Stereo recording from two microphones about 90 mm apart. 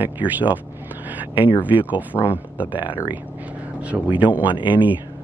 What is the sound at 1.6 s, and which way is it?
Speech, 20° right (ahead or behind).